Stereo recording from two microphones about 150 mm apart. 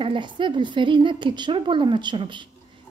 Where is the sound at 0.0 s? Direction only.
35° right (ahead or behind).